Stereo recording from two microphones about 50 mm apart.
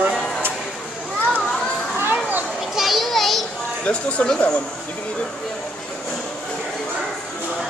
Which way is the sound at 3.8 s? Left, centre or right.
Left.